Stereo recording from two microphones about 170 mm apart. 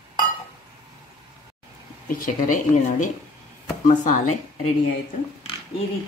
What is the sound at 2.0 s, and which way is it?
Speech, 55° left (ahead or behind).